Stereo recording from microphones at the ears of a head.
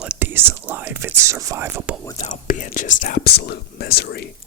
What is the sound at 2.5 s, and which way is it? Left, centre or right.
Whispering, left.